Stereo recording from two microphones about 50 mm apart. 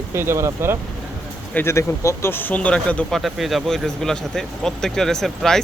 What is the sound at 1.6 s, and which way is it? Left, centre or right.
Speech, left.